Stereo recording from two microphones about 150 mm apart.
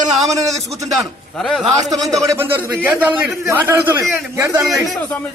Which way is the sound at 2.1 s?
20° right (ahead or behind).